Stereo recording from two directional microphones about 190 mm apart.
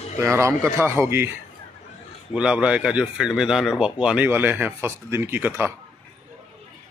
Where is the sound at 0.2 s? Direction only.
15° right (ahead or behind).